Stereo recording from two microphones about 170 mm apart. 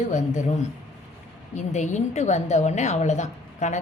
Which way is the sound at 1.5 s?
45° left (ahead or behind).